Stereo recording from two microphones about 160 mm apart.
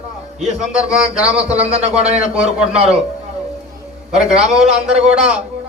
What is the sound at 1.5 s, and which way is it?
Speech, 40° right (ahead or behind).